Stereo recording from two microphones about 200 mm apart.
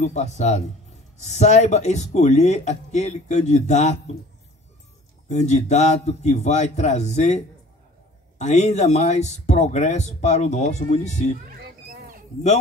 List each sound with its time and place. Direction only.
0.0 s speech: 35° left (ahead or behind)
5.3 s speech: 35° left (ahead or behind)
11.9 s a sound: 50° right (ahead or behind)